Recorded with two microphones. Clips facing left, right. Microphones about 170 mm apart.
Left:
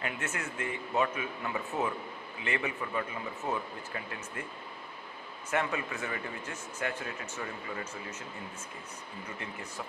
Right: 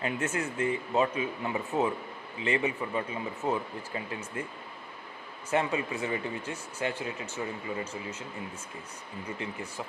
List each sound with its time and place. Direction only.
0.0 s speech: 30° right (ahead or behind)
5.5 s speech: 25° right (ahead or behind)